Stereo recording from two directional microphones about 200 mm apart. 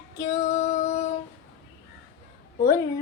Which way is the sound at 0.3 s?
35° left (ahead or behind).